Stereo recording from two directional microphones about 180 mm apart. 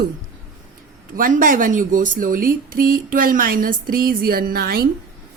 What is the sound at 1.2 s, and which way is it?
A woman's voice, 50° right (ahead or behind).